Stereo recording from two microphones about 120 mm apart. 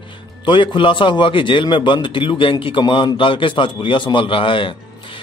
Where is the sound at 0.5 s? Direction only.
45° left (ahead or behind).